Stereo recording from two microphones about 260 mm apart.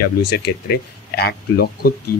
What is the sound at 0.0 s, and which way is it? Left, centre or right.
Speech, left.